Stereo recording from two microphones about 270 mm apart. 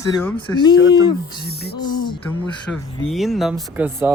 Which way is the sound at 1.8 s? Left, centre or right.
Centre.